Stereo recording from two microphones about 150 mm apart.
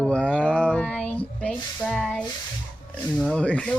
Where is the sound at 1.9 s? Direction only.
5° left (ahead or behind).